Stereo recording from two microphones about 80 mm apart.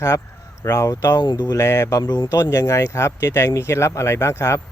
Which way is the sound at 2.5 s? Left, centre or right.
Left.